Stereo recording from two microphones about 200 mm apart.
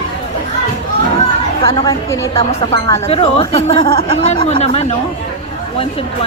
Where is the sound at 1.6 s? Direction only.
15° left (ahead or behind).